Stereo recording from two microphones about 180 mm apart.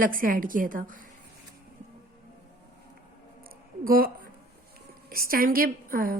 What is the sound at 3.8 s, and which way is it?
A woman's voice, 55° right (ahead or behind).